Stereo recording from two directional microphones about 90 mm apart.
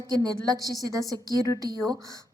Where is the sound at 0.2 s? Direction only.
45° right (ahead or behind).